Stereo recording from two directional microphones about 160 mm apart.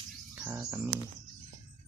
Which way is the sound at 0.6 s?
20° right (ahead or behind).